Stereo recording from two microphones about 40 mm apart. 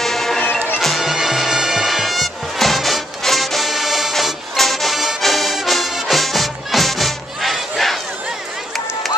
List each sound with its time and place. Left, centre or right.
0.0 s music: centre
0.4 s music: left
0.7 s bagpipes: centre
4.1 s music: centre